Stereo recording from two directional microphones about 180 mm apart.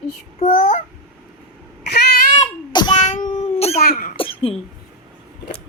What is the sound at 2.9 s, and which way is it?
Cat, 45° left (ahead or behind).